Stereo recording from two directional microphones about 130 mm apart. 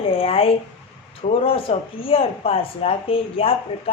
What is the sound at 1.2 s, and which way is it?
Speech, 60° left (ahead or behind).